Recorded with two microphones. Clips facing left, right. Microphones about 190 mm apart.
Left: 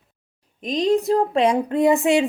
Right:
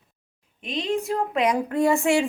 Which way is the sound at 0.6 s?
40° left (ahead or behind).